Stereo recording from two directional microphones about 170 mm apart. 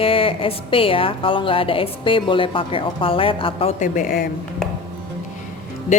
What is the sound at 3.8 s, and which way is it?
Speech, 50° left (ahead or behind).